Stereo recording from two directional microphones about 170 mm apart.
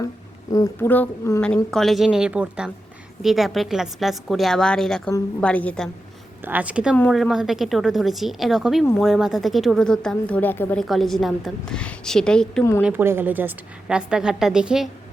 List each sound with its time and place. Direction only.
0.5 s speech: 15° left (ahead or behind)
1.7 s a woman's voice: centre (ahead or behind)
6.4 s a woman's voice: 10° right (ahead or behind); by 10.8 s 10° left (ahead or behind)
10.8 s a woman's voice: centre (ahead or behind)
12.8 s a woman's voice: 10° right (ahead or behind)